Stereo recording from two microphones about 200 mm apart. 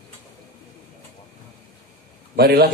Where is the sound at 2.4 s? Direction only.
50° right (ahead or behind).